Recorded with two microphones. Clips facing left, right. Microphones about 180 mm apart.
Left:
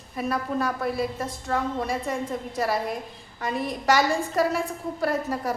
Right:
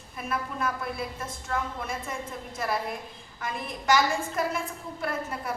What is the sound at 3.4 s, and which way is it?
A woman's voice, 35° left (ahead or behind).